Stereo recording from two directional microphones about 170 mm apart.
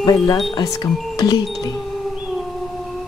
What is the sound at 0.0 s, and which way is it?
Music, 20° left (ahead or behind).